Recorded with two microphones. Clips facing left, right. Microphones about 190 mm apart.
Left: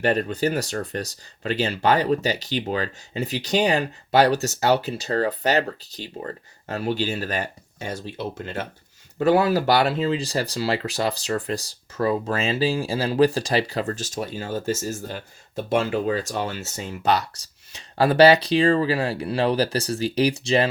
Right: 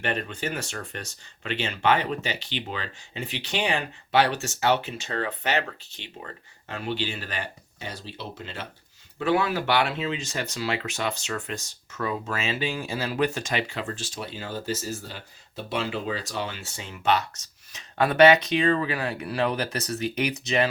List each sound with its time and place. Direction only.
0.0 s speech: 40° left (ahead or behind)